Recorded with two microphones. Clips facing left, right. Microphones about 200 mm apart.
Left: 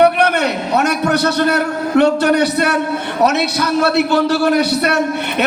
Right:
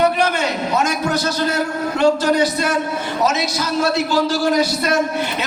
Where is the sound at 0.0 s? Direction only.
65° left (ahead or behind).